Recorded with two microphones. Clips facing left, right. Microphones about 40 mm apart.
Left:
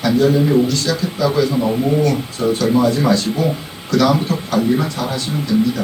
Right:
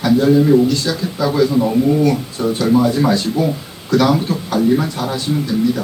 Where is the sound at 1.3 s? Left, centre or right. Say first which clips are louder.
Right 5 dB; centre.